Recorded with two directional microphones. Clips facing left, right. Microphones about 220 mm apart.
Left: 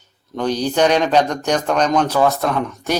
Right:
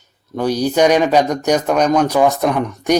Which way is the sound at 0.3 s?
10° right (ahead or behind).